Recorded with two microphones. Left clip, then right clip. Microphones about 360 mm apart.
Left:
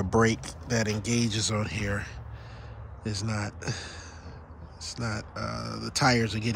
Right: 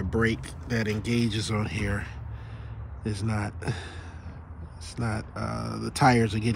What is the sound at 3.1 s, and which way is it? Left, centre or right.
Speech, centre.